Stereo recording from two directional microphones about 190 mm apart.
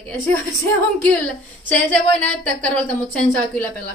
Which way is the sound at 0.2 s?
10° left (ahead or behind).